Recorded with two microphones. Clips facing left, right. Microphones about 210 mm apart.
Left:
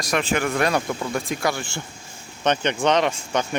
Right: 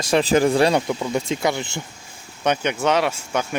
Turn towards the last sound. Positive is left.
turn(degrees=-5)  # may be behind; listen again after turning